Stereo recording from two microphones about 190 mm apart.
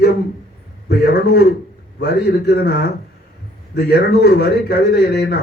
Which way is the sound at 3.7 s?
60° left (ahead or behind).